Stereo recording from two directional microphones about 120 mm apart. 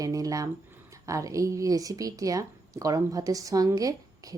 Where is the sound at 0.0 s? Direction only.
30° right (ahead or behind).